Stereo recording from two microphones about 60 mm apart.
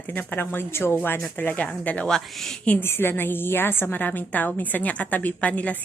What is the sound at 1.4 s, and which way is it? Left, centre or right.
Speech, left.